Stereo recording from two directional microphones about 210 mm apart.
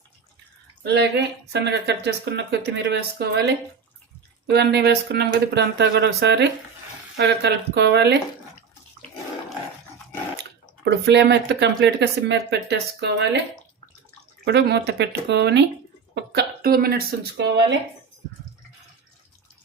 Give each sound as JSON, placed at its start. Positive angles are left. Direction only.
{"t": 0.9, "sound": "speech", "side_deg": -55}
{"t": 10.8, "sound": "speech", "side_deg": -55}
{"t": 14.4, "sound": "speech", "side_deg": -55}